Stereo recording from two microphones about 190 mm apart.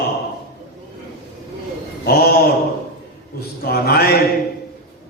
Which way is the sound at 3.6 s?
55° left (ahead or behind).